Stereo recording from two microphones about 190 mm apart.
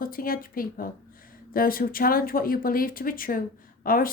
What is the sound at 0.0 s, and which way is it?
A woman's voice, 50° left (ahead or behind).